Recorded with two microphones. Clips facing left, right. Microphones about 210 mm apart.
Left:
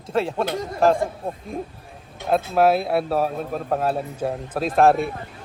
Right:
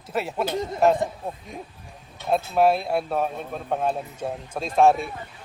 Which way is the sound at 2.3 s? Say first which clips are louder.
Left 2 dB; centre (ahead or behind).